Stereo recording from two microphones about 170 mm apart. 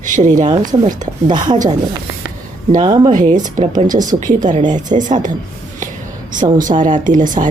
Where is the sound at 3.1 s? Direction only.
50° right (ahead or behind).